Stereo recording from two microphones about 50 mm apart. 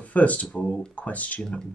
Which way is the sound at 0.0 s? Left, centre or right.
Left.